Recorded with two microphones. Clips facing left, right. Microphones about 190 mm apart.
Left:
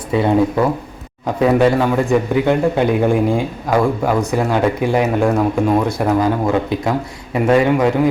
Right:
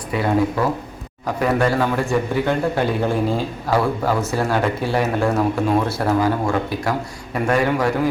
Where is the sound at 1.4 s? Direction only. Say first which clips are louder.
Left 5 dB; 20° left (ahead or behind).